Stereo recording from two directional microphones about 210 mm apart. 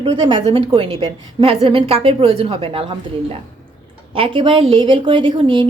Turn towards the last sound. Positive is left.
turn(degrees=-25)  # may be behind; listen again after turning